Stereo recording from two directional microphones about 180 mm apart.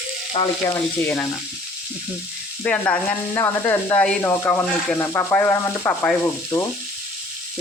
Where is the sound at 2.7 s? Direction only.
5° left (ahead or behind).